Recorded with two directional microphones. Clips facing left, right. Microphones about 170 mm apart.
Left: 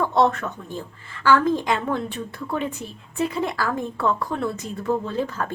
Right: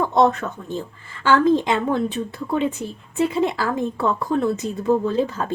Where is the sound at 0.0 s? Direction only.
20° right (ahead or behind).